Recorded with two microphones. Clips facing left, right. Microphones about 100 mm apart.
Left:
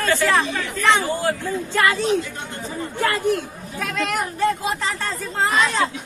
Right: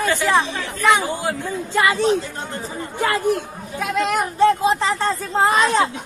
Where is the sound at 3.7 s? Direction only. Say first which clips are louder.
Right 4 dB; 20° right (ahead or behind).